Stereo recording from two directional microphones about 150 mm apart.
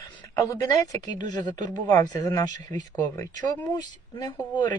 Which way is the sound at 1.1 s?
55° right (ahead or behind).